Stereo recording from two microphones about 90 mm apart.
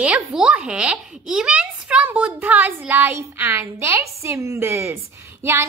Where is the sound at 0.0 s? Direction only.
10° right (ahead or behind).